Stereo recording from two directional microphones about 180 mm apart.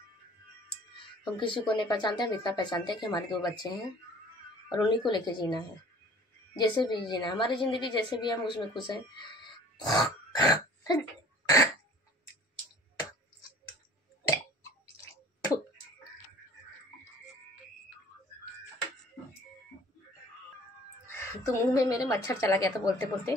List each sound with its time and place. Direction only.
1.3 s speech: 25° left (ahead or behind)
9.8 s grunt: 20° left (ahead or behind)
14.2 s tick-tock: 20° left (ahead or behind)
21.1 s a woman's voice: 15° left (ahead or behind)